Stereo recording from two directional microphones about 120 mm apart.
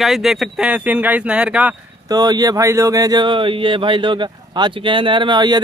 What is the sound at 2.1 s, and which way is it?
Speech, 35° right (ahead or behind).